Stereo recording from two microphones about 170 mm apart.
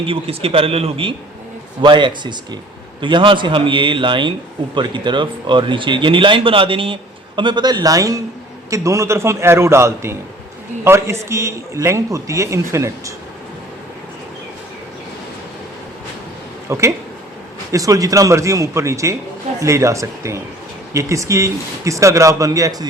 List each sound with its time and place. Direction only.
0.1 s a man's voice: 35° right (ahead or behind); by 13.1 s 15° right (ahead or behind)
16.6 s a man's voice: 15° right (ahead or behind)